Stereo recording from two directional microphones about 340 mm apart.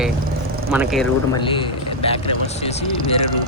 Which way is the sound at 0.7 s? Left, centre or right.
Centre.